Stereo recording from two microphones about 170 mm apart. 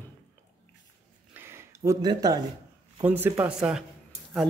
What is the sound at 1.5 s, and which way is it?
Speech, 15° right (ahead or behind).